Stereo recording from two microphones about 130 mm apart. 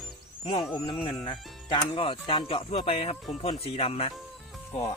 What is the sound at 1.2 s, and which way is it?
Speech, 40° left (ahead or behind).